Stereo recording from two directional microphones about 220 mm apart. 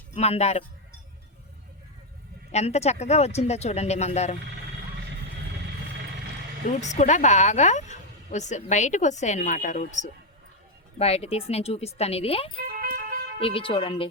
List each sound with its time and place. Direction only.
0.1 s speech: 30° left (ahead or behind)
2.5 s speech: 30° left (ahead or behind)
6.7 s speech: 35° left (ahead or behind)
12.6 s vehicle: 40° right (ahead or behind)
13.4 s speech: 25° left (ahead or behind)